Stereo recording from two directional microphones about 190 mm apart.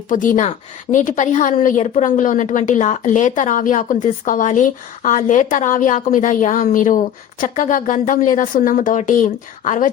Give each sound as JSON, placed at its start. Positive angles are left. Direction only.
{"t": 0.1, "sound": "a woman's voice", "side_deg": 45}